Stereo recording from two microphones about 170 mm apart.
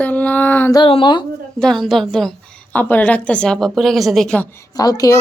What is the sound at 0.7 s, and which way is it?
Speech, 30° left (ahead or behind).